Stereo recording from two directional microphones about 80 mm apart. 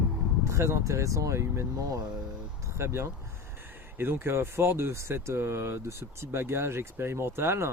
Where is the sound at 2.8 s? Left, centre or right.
Right.